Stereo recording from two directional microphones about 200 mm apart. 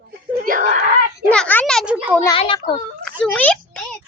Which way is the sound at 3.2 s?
5° left (ahead or behind).